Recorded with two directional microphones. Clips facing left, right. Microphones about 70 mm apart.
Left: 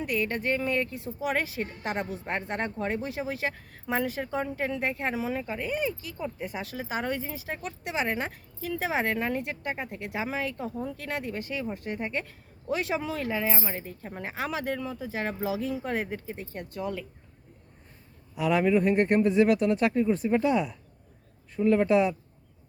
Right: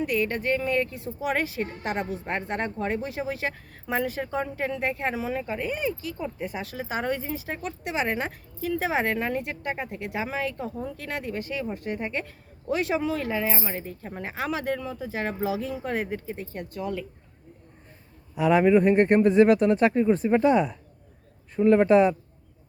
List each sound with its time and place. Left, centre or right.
0.1 s a woman's voice: centre
1.8 s speech: centre
8.0 s speech: centre
8.6 s speech: centre
16.7 s a woman's voice: centre
18.3 s a man's voice: right